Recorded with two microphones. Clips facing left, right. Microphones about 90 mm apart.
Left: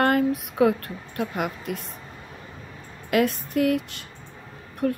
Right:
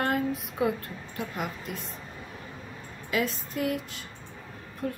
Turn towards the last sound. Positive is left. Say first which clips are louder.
# left 8 dB
turn(degrees=60)  # may be behind; listen again after turning